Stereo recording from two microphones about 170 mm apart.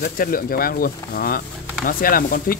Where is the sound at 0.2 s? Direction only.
55° left (ahead or behind).